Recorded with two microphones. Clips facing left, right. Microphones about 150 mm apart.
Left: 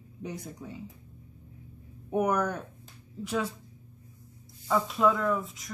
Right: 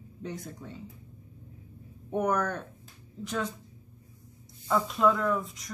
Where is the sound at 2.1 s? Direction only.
10° left (ahead or behind).